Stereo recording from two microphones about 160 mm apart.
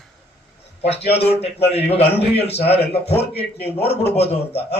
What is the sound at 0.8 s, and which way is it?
Speech, 40° left (ahead or behind).